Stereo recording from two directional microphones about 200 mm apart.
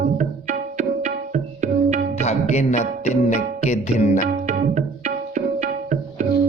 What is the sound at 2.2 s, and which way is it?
Speech, 35° left (ahead or behind).